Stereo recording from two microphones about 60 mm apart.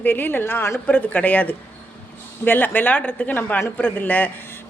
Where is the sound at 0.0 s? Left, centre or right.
Left.